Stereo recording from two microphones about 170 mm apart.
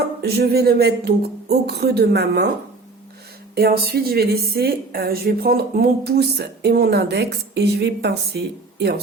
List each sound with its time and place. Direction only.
0.2 s a woman's voice: 70° right (ahead or behind)
3.5 s a woman's voice: 65° right (ahead or behind)